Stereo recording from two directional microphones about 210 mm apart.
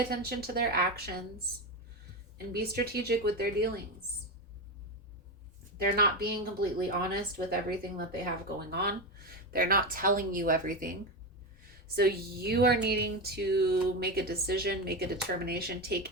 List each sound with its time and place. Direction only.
0.1 s speech: 45° right (ahead or behind)
2.5 s speech: 45° right (ahead or behind)
6.0 s speech: 45° right (ahead or behind)
11.9 s speech: 50° right (ahead or behind)